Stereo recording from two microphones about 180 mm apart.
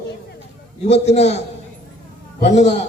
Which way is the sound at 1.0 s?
35° left (ahead or behind).